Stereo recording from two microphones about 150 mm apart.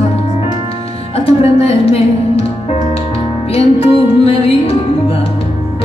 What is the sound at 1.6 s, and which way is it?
Music, 40° left (ahead or behind).